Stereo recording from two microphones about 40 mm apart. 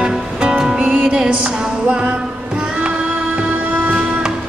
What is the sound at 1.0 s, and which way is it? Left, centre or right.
Music, right.